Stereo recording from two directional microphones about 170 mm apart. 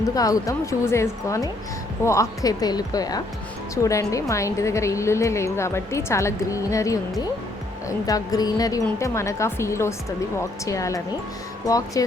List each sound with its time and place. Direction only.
0.1 s a woman's voice: 20° left (ahead or behind)